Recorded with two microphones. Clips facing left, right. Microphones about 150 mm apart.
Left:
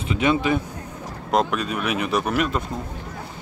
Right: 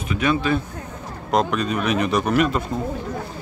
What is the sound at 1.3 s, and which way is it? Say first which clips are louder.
Speech: right 1 dB; 5° left (ahead or behind).